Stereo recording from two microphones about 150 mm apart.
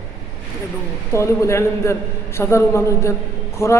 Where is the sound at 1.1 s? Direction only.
20° left (ahead or behind).